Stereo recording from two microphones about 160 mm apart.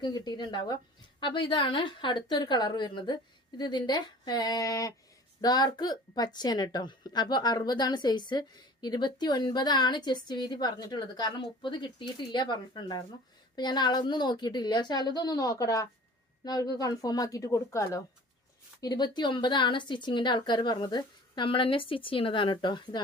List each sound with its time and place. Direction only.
0.0 s a woman's voice: 25° left (ahead or behind)